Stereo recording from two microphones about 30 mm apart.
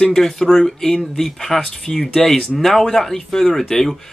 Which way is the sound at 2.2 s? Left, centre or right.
Centre.